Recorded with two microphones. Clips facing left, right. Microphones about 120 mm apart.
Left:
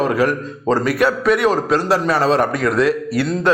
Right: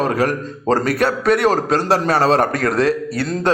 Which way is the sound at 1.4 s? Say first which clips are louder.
Even; 30° right (ahead or behind).